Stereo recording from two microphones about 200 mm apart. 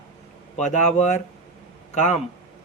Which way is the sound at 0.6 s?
35° left (ahead or behind).